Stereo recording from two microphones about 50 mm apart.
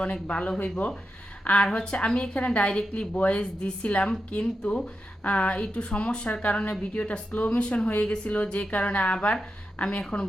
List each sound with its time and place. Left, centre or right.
0.0 s a woman's voice: left
7.6 s a woman's voice: centre